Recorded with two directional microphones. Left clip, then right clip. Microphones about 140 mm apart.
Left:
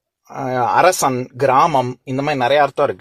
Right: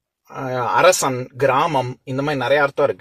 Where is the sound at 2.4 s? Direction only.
55° left (ahead or behind).